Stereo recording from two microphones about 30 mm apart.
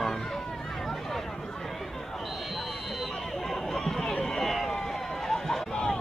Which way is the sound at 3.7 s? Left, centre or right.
Centre.